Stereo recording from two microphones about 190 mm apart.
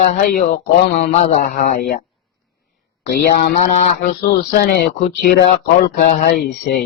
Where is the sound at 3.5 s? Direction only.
40° left (ahead or behind).